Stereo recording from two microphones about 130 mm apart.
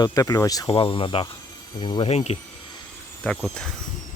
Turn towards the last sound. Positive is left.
turn(degrees=5)  # may be behind; listen again after turning